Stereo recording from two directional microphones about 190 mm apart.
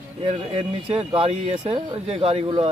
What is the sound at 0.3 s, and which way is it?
Speech, 30° right (ahead or behind).